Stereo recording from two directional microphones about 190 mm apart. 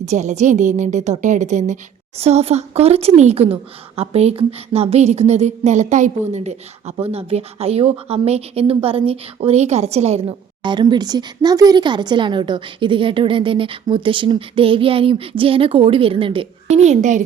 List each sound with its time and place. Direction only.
0.0 s a woman's voice: 35° right (ahead or behind)